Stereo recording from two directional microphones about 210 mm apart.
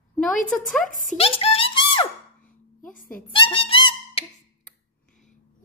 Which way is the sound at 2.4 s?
40° left (ahead or behind).